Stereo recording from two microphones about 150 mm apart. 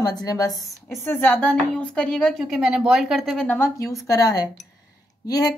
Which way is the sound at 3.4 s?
15° left (ahead or behind).